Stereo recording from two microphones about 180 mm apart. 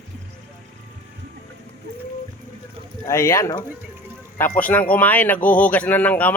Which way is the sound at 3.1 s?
15° left (ahead or behind).